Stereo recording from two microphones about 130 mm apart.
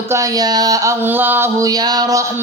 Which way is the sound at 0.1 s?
25° right (ahead or behind).